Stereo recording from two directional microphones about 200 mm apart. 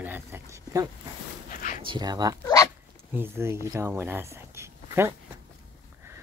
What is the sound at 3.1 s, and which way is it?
Speech, 10° right (ahead or behind).